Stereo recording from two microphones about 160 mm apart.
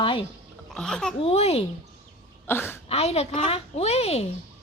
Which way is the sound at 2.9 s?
40° left (ahead or behind).